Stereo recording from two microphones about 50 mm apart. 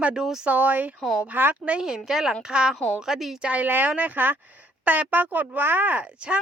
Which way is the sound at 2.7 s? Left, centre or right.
Centre.